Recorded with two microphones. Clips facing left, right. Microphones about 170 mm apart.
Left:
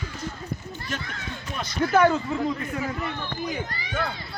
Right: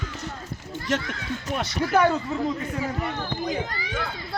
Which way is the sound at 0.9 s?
90° right.